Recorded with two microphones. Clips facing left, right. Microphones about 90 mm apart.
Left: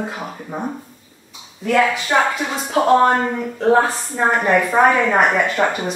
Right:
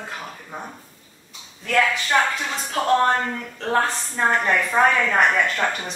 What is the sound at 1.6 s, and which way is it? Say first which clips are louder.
A woman's voice: left 4 dB; 15° left (ahead or behind).